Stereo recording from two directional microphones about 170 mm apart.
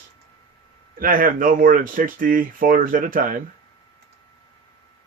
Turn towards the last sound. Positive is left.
turn(degrees=-55)  # may be behind; listen again after turning